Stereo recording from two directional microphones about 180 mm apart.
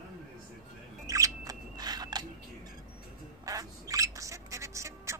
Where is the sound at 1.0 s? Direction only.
20° right (ahead or behind).